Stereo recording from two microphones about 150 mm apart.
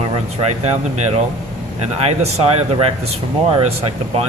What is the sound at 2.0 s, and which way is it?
Speech, 45° right (ahead or behind).